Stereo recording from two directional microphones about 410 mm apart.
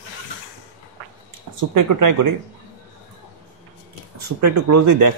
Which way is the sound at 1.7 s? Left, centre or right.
Right.